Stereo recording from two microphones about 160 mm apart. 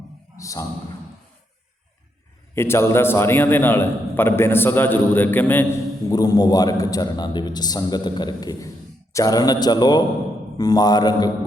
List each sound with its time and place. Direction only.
0.3 s a man's voice: 20° left (ahead or behind)
2.6 s a man's voice: 15° left (ahead or behind)
6.1 s a man's voice: 25° left (ahead or behind)